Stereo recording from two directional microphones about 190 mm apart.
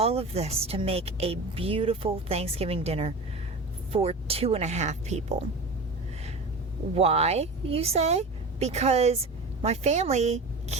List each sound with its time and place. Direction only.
0.0 s a woman's voice: 30° right (ahead or behind)
6.9 s a woman's voice: 35° right (ahead or behind)